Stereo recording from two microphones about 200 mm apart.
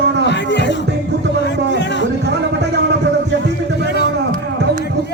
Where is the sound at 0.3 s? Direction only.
60° left (ahead or behind).